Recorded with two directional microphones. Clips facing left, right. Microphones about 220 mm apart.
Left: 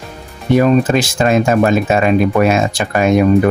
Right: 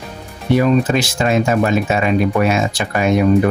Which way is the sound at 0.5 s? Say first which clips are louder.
Left 3 dB; 50° left (ahead or behind).